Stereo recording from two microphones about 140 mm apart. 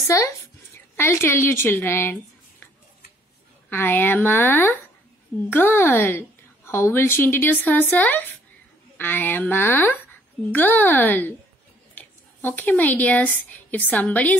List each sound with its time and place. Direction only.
0.1 s a woman's voice: 20° left (ahead or behind)
3.7 s a woman's voice: 15° left (ahead or behind)